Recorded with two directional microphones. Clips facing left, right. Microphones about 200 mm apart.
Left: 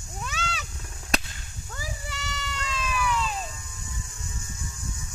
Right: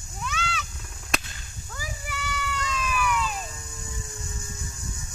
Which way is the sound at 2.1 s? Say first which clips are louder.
Right 4 dB; 25° left (ahead or behind).